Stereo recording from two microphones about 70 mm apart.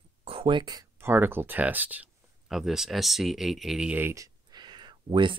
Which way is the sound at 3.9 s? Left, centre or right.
Right.